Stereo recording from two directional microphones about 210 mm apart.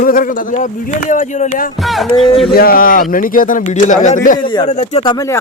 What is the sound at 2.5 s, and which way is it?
Speech, 45° left (ahead or behind).